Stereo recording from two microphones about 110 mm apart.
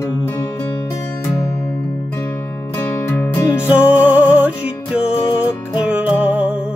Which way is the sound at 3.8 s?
10° right (ahead or behind).